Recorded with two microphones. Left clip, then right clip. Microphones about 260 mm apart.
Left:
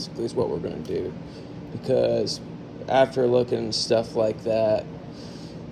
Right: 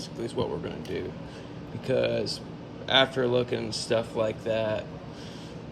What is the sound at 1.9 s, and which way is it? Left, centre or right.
Speech, centre.